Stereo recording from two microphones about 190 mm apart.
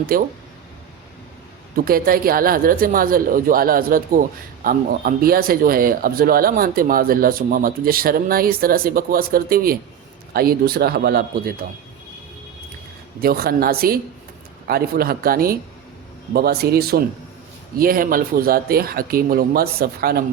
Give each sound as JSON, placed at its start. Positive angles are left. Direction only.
{"t": 0.1, "sound": "speech", "side_deg": -50}
{"t": 1.7, "sound": "speech", "side_deg": -50}
{"t": 13.2, "sound": "a man's voice", "side_deg": -50}